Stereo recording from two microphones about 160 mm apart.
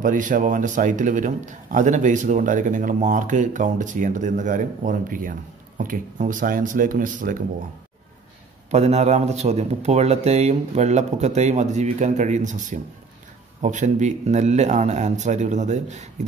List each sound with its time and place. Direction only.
0.0 s a man's voice: 55° right (ahead or behind)
8.6 s a man's voice: 45° right (ahead or behind)